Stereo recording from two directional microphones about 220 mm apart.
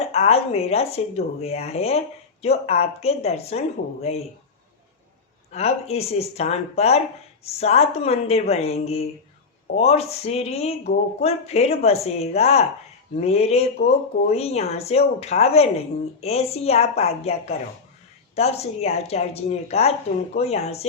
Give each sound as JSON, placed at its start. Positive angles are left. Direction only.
{"t": 0.0, "sound": "speech", "side_deg": 30}
{"t": 5.5, "sound": "speech", "side_deg": 30}